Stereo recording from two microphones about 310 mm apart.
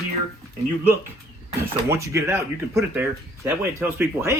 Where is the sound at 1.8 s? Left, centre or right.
Centre.